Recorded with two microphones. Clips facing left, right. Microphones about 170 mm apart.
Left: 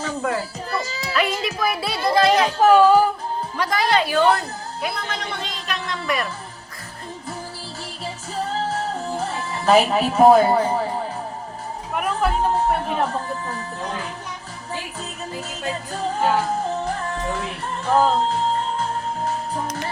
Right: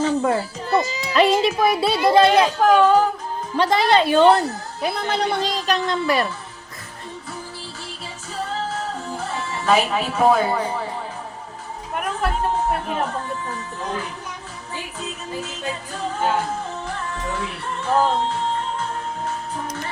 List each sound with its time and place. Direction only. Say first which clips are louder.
0.0 s children playing: right 5 dB; 30° right (ahead or behind)
1.1 s speech: right 7 dB; 30° right (ahead or behind)
2.6 s speech: left 4 dB; 5° left (ahead or behind)
3.6 s a woman's voice: right 4 dB; 25° right (ahead or behind)
8.5 s music: left 2 dB; 40° left (ahead or behind)
16.8 s music: left 3 dB; 35° left (ahead or behind)